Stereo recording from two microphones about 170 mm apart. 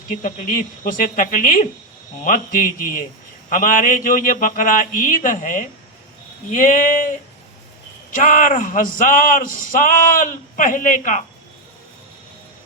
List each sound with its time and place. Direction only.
0.2 s speech: 55° left (ahead or behind)